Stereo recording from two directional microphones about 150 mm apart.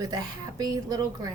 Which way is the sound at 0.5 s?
25° right (ahead or behind).